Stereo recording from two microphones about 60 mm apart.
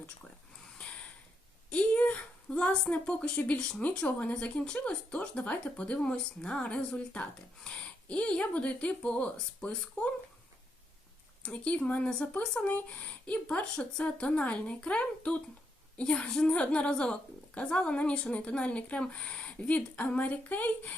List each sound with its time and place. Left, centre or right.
0.8 s a sound: centre
1.7 s a woman's voice: left
11.4 s speech: centre
13.7 s speech: centre